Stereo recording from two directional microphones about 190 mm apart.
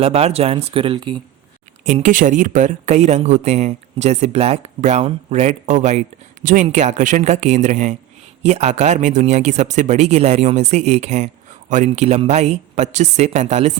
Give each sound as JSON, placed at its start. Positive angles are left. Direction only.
{"t": 0.0, "sound": "speech", "side_deg": -30}
{"t": 1.9, "sound": "speech", "side_deg": -40}